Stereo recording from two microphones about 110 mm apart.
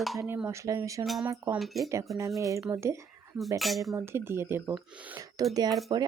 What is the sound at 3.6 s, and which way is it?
Dishes, centre (ahead or behind).